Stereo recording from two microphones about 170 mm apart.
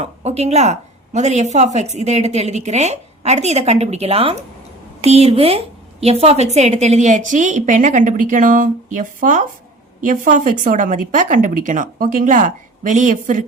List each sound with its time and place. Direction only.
0.0 s a woman's voice: 40° right (ahead or behind)